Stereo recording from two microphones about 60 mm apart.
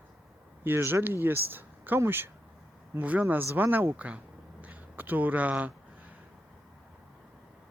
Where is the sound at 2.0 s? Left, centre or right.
Right.